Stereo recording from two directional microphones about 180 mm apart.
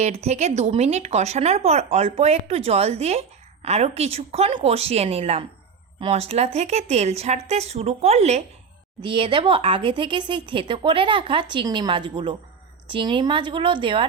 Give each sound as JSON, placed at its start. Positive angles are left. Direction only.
{"t": 0.0, "sound": "speech", "side_deg": -35}